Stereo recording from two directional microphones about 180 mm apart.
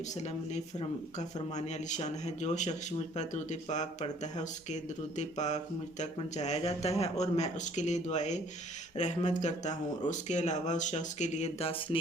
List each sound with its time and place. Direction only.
0.2 s speech: 40° left (ahead or behind)